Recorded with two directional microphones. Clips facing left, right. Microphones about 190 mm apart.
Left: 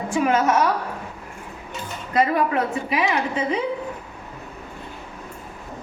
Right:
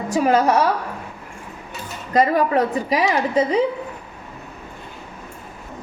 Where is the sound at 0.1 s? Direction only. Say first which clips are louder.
Right 3 dB; 35° right (ahead or behind).